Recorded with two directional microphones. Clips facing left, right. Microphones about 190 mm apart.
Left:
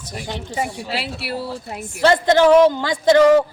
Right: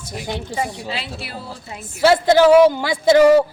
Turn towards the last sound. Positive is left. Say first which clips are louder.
# right 1 dB
turn(degrees=-10)  # may be behind; listen again after turning